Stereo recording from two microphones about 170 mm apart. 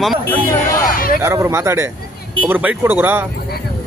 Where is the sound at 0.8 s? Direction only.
60° left (ahead or behind).